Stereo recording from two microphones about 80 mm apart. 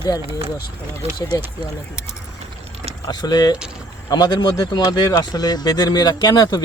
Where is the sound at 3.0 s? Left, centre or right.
Left.